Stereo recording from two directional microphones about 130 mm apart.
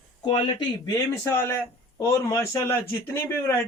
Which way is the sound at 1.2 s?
20° left (ahead or behind).